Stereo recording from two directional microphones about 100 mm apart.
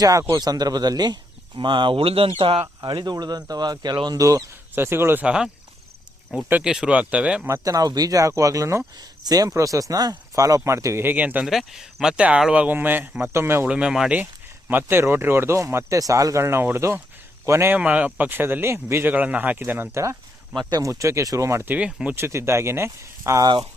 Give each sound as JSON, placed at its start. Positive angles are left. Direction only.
{"t": 0.0, "sound": "speech", "side_deg": -35}
{"t": 4.7, "sound": "speech", "side_deg": -25}
{"t": 5.2, "sound": "speech", "side_deg": -10}
{"t": 6.5, "sound": "speech", "side_deg": -10}
{"t": 7.4, "sound": "speech", "side_deg": -30}
{"t": 11.4, "sound": "speech", "side_deg": -5}
{"t": 13.7, "sound": "speech", "side_deg": -10}
{"t": 14.7, "sound": "a man's voice", "side_deg": -20}
{"t": 17.7, "sound": "speech", "side_deg": -15}
{"t": 20.6, "sound": "speech", "side_deg": -40}
{"t": 21.8, "sound": "speech", "side_deg": -10}
{"t": 22.1, "sound": "speech", "side_deg": -25}